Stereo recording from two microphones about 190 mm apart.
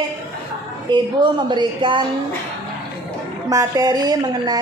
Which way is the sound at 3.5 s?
20° right (ahead or behind).